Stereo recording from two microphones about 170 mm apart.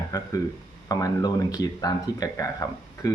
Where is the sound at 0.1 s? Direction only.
20° left (ahead or behind).